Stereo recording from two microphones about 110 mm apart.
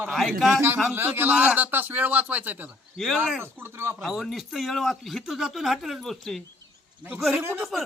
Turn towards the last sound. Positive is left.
turn(degrees=0)  # may be behind; listen again after turning